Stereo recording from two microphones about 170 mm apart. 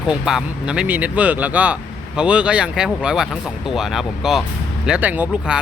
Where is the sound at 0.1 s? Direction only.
5° right (ahead or behind).